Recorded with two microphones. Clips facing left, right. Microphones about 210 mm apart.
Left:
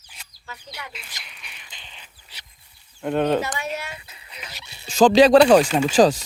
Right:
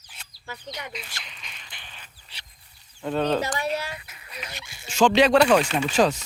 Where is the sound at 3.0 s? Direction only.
15° left (ahead or behind).